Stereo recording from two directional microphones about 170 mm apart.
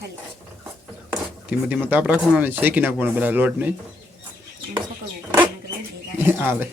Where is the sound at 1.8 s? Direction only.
10° right (ahead or behind).